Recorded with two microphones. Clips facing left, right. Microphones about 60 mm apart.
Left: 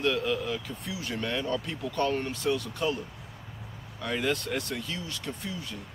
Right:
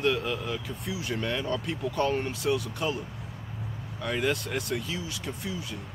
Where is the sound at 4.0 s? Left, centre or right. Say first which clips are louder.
Right 1 dB; centre.